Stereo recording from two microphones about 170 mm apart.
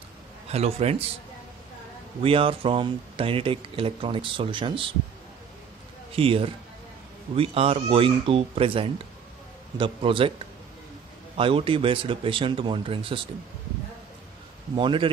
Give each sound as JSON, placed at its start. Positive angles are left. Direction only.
{"t": 0.5, "sound": "speech", "side_deg": -40}
{"t": 2.2, "sound": "speech", "side_deg": -35}
{"t": 6.1, "sound": "speech", "side_deg": -35}
{"t": 11.3, "sound": "speech", "side_deg": -30}
{"t": 14.8, "sound": "a man's voice", "side_deg": -30}